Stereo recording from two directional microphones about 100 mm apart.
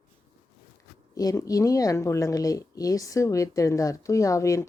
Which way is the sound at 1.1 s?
35° left (ahead or behind).